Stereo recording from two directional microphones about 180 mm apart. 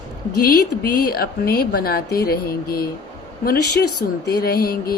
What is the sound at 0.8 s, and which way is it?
A woman's voice, 60° left (ahead or behind).